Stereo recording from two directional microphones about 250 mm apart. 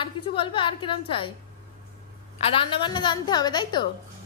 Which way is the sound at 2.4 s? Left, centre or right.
Left.